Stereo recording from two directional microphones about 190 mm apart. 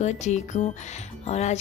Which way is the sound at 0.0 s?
40° left (ahead or behind).